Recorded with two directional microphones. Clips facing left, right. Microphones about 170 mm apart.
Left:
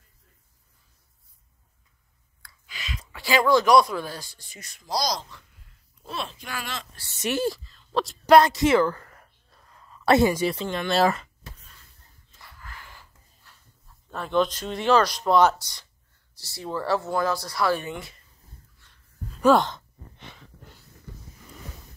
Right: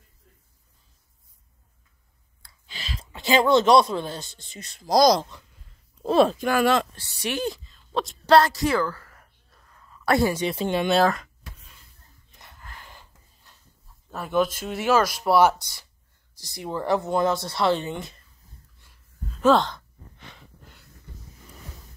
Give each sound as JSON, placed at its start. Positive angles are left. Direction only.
{"t": 2.4, "sound": "speech", "side_deg": -30}
{"t": 4.8, "sound": "speech", "side_deg": -50}
{"t": 6.2, "sound": "speech", "side_deg": -50}
{"t": 7.2, "sound": "speech", "side_deg": 5}
{"t": 8.3, "sound": "speech", "side_deg": 20}
{"t": 9.7, "sound": "a sound", "side_deg": 25}
{"t": 10.5, "sound": "speech", "side_deg": -10}
{"t": 10.9, "sound": "speech", "side_deg": 5}
{"t": 11.4, "sound": "a sound", "side_deg": -10}
{"t": 14.1, "sound": "speech", "side_deg": -5}
{"t": 18.8, "sound": "a sound", "side_deg": -10}
{"t": 19.4, "sound": "sigh", "side_deg": 15}